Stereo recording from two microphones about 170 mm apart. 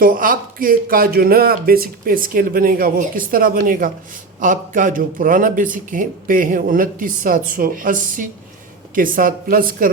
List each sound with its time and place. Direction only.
0.0 s a man's voice: 55° right (ahead or behind)